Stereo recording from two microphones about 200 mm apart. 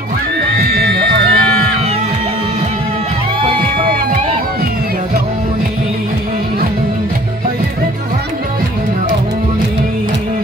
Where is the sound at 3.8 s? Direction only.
30° right (ahead or behind).